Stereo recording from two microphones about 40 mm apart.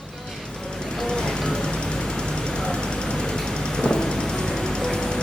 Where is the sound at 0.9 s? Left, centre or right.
Centre.